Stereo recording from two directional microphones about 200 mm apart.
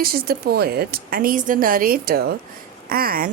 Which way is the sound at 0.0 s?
50° right (ahead or behind).